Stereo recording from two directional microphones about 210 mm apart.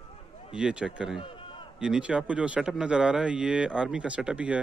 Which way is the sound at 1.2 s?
25° left (ahead or behind).